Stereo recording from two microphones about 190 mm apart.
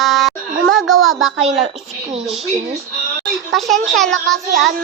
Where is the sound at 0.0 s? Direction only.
Centre (ahead or behind).